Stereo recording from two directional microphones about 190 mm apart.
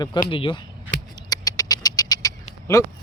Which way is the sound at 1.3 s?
20° left (ahead or behind).